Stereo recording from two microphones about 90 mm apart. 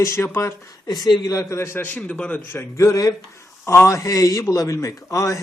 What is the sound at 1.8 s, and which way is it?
Speech, 15° left (ahead or behind).